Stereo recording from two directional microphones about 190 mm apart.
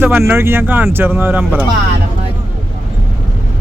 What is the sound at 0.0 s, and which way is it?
Speech, 10° right (ahead or behind).